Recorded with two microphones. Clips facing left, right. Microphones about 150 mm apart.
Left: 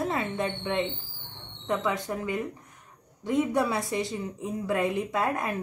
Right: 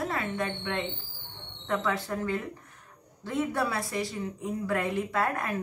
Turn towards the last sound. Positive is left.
turn(degrees=20)  # may be behind; listen again after turning